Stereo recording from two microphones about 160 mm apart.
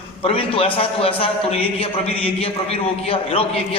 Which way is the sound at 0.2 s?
35° left (ahead or behind).